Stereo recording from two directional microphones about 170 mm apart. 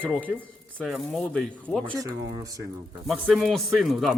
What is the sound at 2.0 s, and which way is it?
Speech, 20° right (ahead or behind).